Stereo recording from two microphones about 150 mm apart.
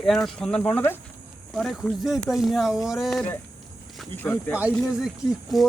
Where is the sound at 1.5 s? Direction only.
Centre (ahead or behind).